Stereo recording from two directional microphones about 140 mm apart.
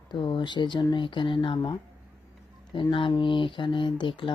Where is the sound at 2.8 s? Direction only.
35° left (ahead or behind).